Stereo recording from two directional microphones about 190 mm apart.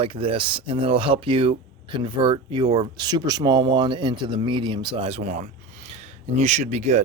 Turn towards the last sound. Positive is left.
turn(degrees=-35)  # may be behind; listen again after turning